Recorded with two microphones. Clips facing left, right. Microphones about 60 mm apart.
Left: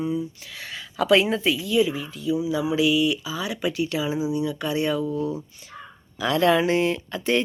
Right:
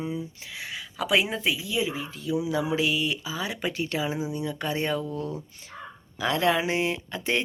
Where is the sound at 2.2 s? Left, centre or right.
Right.